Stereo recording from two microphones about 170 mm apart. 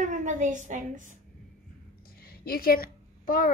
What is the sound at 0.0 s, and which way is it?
A woman's voice, 45° right (ahead or behind).